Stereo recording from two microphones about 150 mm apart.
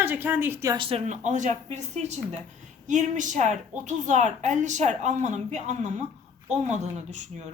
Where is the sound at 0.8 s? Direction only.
40° right (ahead or behind).